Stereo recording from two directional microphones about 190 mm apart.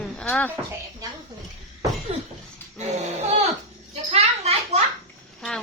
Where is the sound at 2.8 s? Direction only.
35° right (ahead or behind).